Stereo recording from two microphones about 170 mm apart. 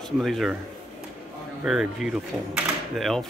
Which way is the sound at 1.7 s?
5° right (ahead or behind).